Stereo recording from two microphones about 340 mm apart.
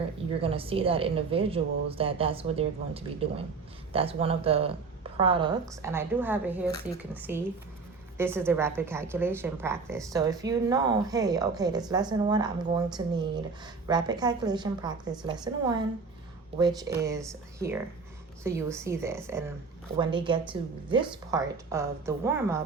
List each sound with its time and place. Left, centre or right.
0.4 s a woman's voice: centre